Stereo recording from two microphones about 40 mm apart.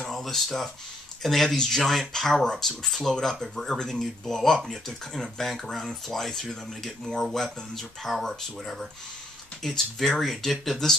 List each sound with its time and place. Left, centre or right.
0.0 s speech: centre